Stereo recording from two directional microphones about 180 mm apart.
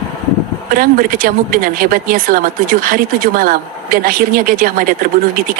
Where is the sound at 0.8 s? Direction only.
50° right (ahead or behind).